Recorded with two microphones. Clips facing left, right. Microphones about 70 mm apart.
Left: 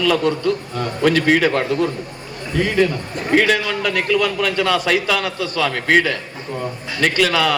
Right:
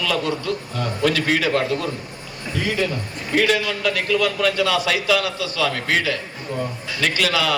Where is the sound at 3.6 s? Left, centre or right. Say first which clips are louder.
Left 2 dB; left.